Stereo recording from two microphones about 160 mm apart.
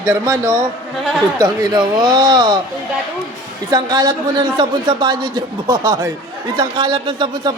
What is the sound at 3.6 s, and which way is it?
Speech, 25° right (ahead or behind).